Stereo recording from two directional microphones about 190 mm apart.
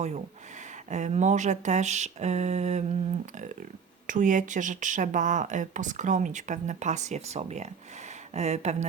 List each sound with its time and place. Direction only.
0.9 s speech: 40° right (ahead or behind)
4.0 s speech: 40° right (ahead or behind)